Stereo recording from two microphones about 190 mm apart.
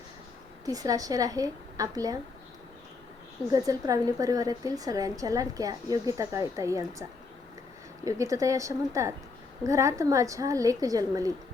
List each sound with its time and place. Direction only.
0.6 s a woman's voice: 20° right (ahead or behind)
3.5 s a woman's voice: 20° right (ahead or behind)
8.0 s a woman's voice: 15° right (ahead or behind)